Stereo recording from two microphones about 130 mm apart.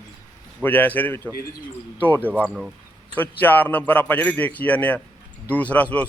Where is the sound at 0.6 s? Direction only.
15° left (ahead or behind).